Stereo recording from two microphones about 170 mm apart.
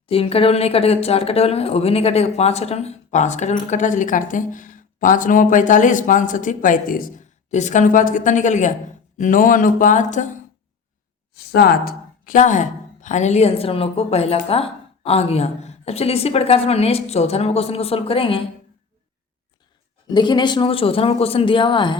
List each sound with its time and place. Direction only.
0.1 s speech: 35° left (ahead or behind); by 7.1 s 55° left (ahead or behind)
7.5 s speech: 45° left (ahead or behind)
11.3 s speech: 65° left (ahead or behind); by 18.4 s 30° left (ahead or behind)
20.1 s speech: 25° left (ahead or behind)